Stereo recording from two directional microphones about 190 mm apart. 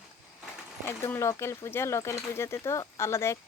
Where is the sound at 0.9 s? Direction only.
15° left (ahead or behind).